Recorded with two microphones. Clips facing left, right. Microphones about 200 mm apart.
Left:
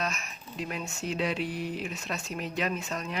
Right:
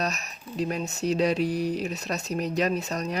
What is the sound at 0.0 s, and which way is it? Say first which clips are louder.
Speech: right 4 dB; 40° right (ahead or behind).